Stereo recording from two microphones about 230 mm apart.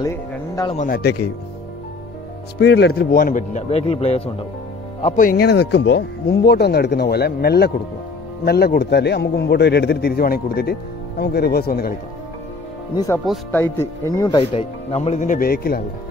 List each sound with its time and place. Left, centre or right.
0.0 s speech: centre
0.7 s a man's voice: left
2.6 s a man's voice: left
12.9 s speech: centre
13.2 s speech: centre
13.6 s speech: centre; by 15.8 s left